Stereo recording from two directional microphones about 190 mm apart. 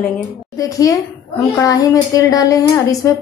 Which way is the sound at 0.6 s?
20° left (ahead or behind).